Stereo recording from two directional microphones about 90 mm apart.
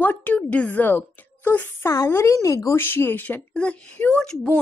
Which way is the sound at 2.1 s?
35° left (ahead or behind).